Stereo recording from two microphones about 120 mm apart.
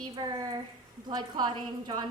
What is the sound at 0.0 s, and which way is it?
A woman's voice, 35° right (ahead or behind).